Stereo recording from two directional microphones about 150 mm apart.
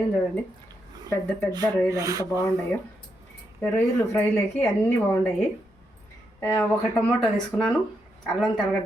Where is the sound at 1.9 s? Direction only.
25° right (ahead or behind).